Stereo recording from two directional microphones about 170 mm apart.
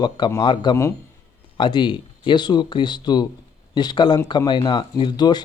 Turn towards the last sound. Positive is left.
turn(degrees=25)  # may be behind; listen again after turning